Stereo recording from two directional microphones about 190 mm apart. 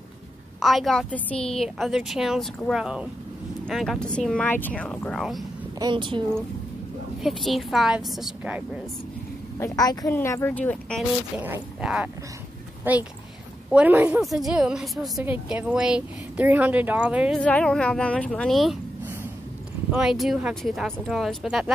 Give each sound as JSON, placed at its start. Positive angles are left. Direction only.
{"t": 0.6, "sound": "a woman's voice", "side_deg": 0}
{"t": 5.8, "sound": "speech", "side_deg": -25}
{"t": 7.2, "sound": "a woman's voice", "side_deg": 0}
{"t": 9.6, "sound": "a woman's voice", "side_deg": 20}
{"t": 11.3, "sound": "a woman's voice", "side_deg": -10}
{"t": 17.4, "sound": "a woman's voice", "side_deg": 5}
{"t": 19.9, "sound": "a woman's voice", "side_deg": -5}